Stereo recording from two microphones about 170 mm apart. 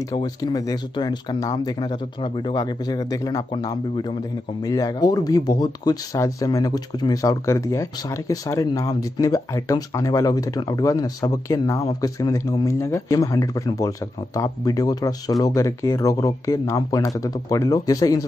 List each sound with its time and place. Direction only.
0.1 s speech: 25° left (ahead or behind)